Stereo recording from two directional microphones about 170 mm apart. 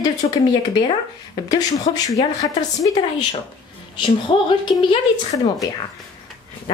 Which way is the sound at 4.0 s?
30° left (ahead or behind).